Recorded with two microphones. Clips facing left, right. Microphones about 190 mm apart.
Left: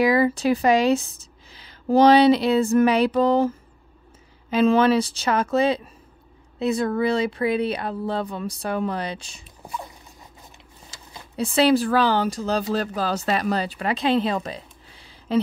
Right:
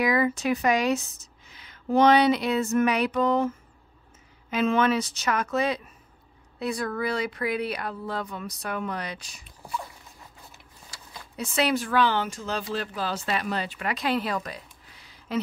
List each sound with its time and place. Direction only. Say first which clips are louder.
0.0 s speech: left 5 dB; 30° left (ahead or behind)
10.9 s speech: left 1 dB; 25° left (ahead or behind)